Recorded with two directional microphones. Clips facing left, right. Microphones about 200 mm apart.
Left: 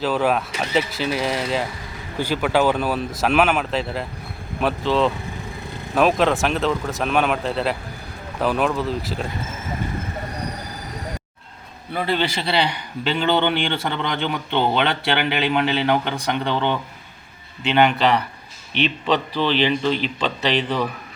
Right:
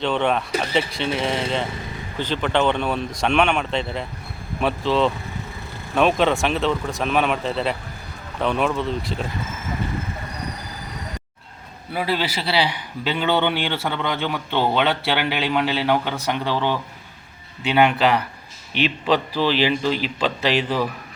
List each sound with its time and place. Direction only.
0.0 s a man's voice: 5° left (ahead or behind)
11.9 s a man's voice: 5° right (ahead or behind)